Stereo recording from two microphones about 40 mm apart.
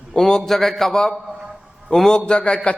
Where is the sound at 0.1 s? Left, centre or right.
Centre.